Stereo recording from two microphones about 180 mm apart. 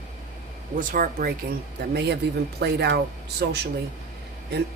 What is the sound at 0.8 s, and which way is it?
Speech, 50° right (ahead or behind).